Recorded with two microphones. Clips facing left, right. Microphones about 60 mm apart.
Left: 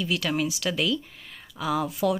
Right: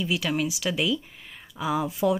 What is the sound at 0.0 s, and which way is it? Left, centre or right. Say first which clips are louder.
Speech: even; centre.